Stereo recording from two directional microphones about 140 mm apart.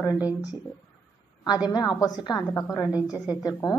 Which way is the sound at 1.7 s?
25° left (ahead or behind).